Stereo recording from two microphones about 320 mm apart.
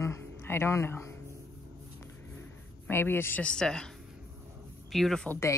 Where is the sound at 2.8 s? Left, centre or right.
Centre.